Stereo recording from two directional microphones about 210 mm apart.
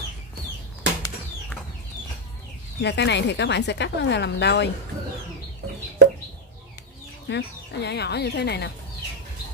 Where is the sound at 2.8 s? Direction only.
55° left (ahead or behind).